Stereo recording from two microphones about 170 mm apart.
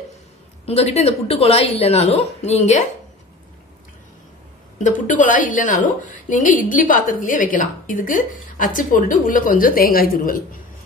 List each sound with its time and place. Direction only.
0.7 s a woman's voice: 40° left (ahead or behind)
4.7 s a woman's voice: 45° left (ahead or behind)